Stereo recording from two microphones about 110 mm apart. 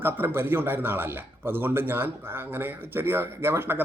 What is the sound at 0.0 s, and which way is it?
A man's voice, 20° right (ahead or behind).